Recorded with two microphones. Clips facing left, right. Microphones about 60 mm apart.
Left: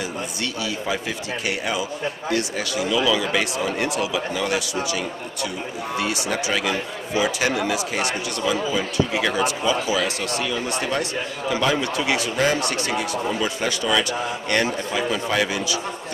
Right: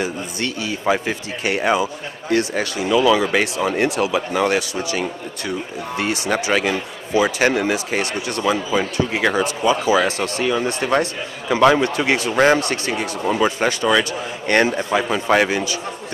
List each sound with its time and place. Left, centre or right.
0.0 s speech: right